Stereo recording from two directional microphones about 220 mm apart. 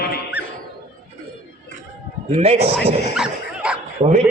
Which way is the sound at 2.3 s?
30° right (ahead or behind).